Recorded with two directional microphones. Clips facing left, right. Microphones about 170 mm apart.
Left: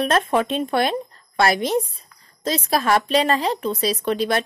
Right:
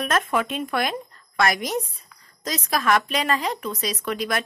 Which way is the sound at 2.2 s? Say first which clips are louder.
Left 6 dB; 30° left (ahead or behind).